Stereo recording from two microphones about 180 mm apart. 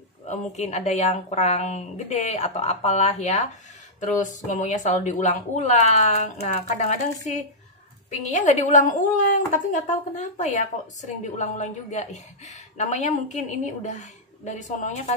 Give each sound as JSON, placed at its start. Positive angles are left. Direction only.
{"t": 0.3, "sound": "a woman's voice", "side_deg": 40}
{"t": 8.1, "sound": "a woman's voice", "side_deg": 40}